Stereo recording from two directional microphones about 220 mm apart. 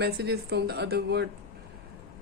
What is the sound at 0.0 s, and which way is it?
Speech, 50° right (ahead or behind).